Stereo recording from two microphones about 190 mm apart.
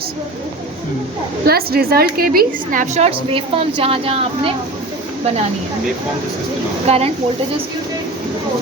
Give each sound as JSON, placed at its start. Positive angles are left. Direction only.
{"t": 1.5, "sound": "a woman's voice", "side_deg": -55}
{"t": 6.8, "sound": "a woman's voice", "side_deg": -35}